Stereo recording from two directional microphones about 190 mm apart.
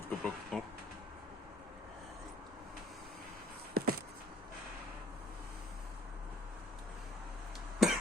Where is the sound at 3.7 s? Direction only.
55° right (ahead or behind).